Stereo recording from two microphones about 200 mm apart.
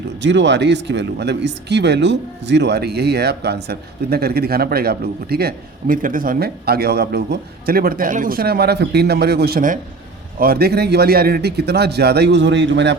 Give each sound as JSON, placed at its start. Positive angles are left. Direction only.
{"t": 0.2, "sound": "a man's voice", "side_deg": -65}